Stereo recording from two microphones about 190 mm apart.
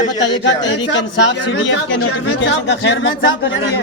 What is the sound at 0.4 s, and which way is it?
Speech, 70° left (ahead or behind).